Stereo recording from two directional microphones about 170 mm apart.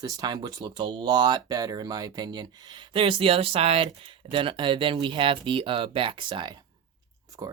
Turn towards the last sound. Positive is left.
turn(degrees=-25)  # may be behind; listen again after turning